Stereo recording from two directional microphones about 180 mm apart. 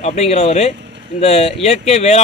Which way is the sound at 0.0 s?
35° left (ahead or behind).